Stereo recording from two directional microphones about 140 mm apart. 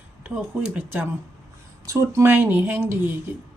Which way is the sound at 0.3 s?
5° right (ahead or behind).